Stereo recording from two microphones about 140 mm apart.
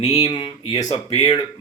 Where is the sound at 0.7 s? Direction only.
30° left (ahead or behind).